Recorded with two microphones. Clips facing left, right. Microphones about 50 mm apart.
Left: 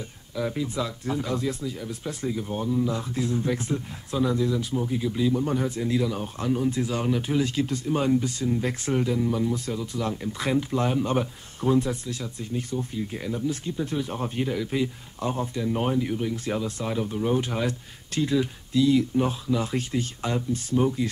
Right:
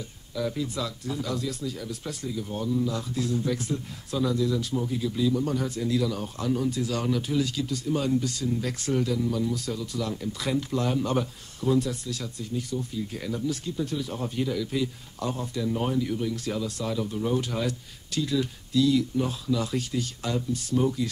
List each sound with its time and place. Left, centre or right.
0.3 s speech: left